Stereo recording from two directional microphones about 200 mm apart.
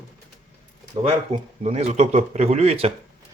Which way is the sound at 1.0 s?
30° right (ahead or behind).